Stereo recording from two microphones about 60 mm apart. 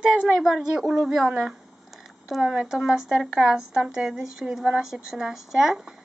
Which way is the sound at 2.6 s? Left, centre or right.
Centre.